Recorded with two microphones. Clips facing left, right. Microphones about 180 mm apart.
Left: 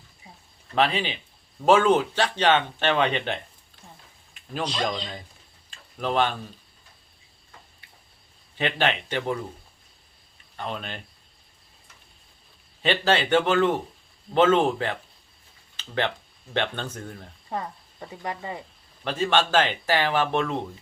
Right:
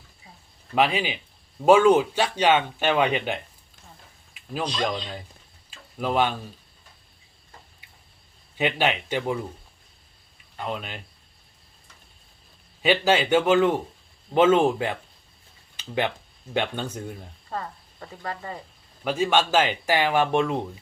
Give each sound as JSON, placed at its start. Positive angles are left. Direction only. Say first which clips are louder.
{"t": 0.8, "sound": "speech", "louder": "right 1 dB", "side_deg": -10}
{"t": 4.4, "sound": "a sound", "louder": "right 1 dB", "side_deg": -5}
{"t": 6.0, "sound": "speech", "louder": "right 1 dB", "side_deg": -10}
{"t": 8.5, "sound": "speech", "louder": "right 1 dB", "side_deg": -10}
{"t": 10.6, "sound": "speech", "louder": "right 1 dB", "side_deg": -5}
{"t": 12.8, "sound": "speech", "louder": "right 2 dB", "side_deg": -10}
{"t": 15.7, "sound": "a sound", "louder": "right 1 dB", "side_deg": -10}
{"t": 16.6, "sound": "speech", "louder": "right 1 dB", "side_deg": -10}
{"t": 17.5, "sound": "speech", "louder": "left 1 dB", "side_deg": 15}
{"t": 19.0, "sound": "speech", "louder": "right 1 dB", "side_deg": -10}